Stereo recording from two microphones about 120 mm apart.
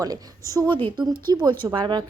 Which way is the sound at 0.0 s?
30° right (ahead or behind).